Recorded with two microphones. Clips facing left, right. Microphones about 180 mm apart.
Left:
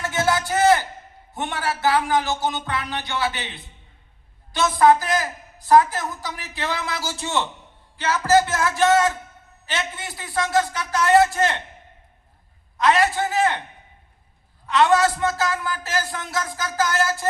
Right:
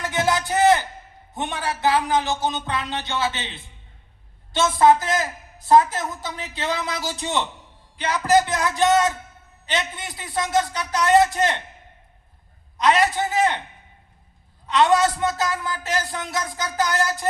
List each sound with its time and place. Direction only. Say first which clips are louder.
0.0 s a sound: even; 20° right (ahead or behind)
1.3 s a woman's voice: left 1 dB; 20° right (ahead or behind)
12.7 s a woman's voice: even; 20° right (ahead or behind)
14.7 s a woman's voice: even; 20° right (ahead or behind)